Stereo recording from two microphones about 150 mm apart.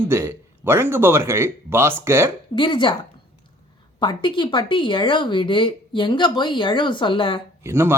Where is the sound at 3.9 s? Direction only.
30° left (ahead or behind).